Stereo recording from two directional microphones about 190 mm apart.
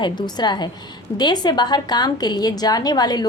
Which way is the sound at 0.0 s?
20° left (ahead or behind).